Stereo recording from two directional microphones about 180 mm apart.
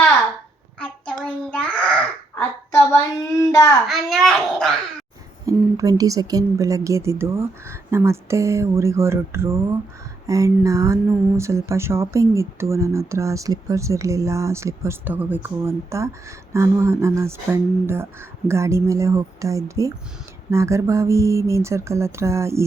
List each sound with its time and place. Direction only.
0.8 s a sound: 5° left (ahead or behind)
3.3 s child singing: 20° left (ahead or behind)
3.8 s babbling: centre (ahead or behind)
5.5 s speech: 20° right (ahead or behind)